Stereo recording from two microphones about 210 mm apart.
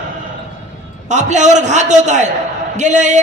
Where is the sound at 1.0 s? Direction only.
35° right (ahead or behind).